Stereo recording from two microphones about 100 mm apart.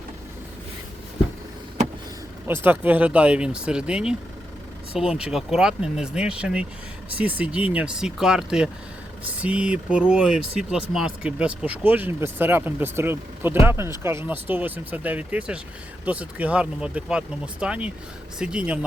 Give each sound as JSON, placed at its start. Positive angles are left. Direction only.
{"t": 2.5, "sound": "speech", "side_deg": -20}